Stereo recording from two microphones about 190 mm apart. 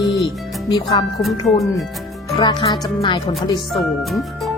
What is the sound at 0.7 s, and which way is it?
Speech, 25° left (ahead or behind).